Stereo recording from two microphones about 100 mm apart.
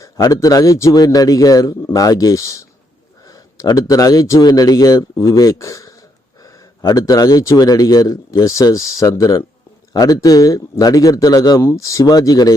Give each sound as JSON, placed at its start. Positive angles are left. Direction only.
{"t": 0.0, "sound": "a man's voice", "side_deg": 35}